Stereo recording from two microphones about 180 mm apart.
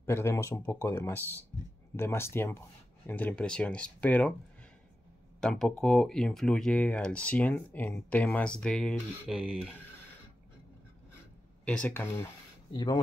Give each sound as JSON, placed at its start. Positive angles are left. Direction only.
{"t": 0.0, "sound": "speech", "side_deg": 15}
{"t": 5.4, "sound": "speech", "side_deg": 5}
{"t": 11.6, "sound": "speech", "side_deg": 5}
{"t": 12.7, "sound": "speech", "side_deg": 25}